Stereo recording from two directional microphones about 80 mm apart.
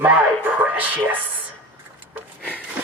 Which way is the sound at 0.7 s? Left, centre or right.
Right.